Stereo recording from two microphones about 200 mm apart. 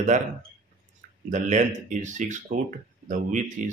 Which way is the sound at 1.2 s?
40° right (ahead or behind).